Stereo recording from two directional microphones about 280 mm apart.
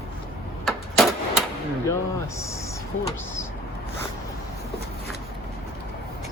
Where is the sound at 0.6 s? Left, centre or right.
Centre.